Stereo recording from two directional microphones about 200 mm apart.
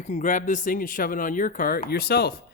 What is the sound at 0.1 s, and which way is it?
Speech, 40° left (ahead or behind).